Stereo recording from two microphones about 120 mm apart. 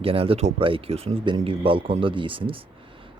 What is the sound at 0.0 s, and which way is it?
Speech, 50° right (ahead or behind).